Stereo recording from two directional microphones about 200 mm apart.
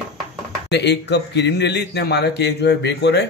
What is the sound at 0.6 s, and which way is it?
A man's voice, 55° left (ahead or behind).